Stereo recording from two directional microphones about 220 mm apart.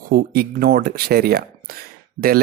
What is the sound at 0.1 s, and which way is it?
Speech, 45° right (ahead or behind).